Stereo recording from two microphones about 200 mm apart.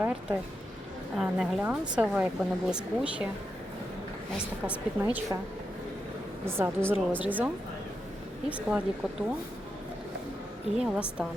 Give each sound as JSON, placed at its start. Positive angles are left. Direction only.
{"t": 0.0, "sound": "speech", "side_deg": -5}
{"t": 5.0, "sound": "a woman's voice", "side_deg": -10}
{"t": 6.4, "sound": "a woman's voice", "side_deg": -10}
{"t": 10.8, "sound": "speech", "side_deg": -5}